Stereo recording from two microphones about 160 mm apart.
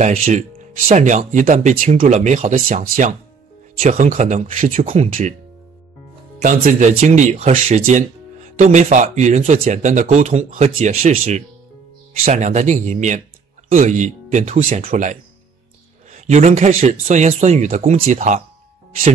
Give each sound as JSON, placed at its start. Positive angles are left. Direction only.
{"t": 0.0, "sound": "speech", "side_deg": -55}
{"t": 6.4, "sound": "speech", "side_deg": -55}